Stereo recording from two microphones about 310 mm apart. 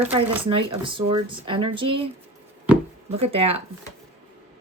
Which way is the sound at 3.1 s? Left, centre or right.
Centre.